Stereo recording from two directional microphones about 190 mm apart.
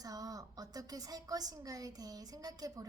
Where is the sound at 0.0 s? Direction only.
20° right (ahead or behind).